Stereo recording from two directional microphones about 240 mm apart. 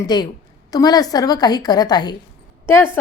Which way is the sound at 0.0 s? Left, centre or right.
Centre.